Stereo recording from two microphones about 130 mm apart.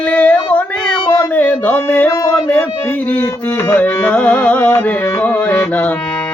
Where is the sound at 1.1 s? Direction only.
15° left (ahead or behind).